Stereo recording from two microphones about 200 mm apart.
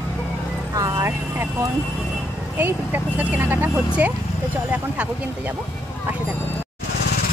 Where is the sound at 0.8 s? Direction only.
15° right (ahead or behind).